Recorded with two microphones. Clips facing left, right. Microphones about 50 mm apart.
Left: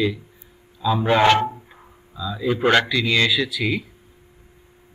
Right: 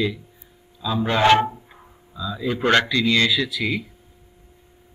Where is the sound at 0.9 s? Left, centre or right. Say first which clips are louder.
Left 3 dB; centre.